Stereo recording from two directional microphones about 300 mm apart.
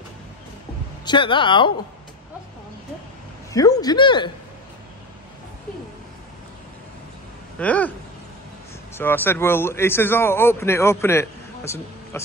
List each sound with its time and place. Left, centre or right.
1.0 s speech: centre
3.7 s speech: centre
7.5 s speech: centre
8.9 s speech: centre